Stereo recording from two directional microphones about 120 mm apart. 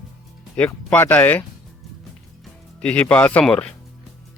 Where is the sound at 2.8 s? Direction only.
10° left (ahead or behind).